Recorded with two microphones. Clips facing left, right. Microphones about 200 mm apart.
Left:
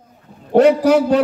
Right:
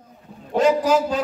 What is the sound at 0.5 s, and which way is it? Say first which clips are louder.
Speech: left 6 dB; 65° left (ahead or behind).